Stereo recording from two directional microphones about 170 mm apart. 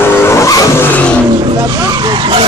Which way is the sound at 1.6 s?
25° right (ahead or behind).